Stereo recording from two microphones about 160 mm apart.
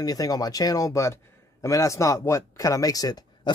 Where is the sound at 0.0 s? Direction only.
25° left (ahead or behind).